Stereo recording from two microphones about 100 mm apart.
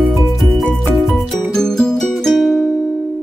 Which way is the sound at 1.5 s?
5° left (ahead or behind).